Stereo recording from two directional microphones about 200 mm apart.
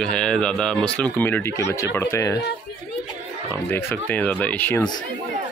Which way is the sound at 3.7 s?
10° left (ahead or behind).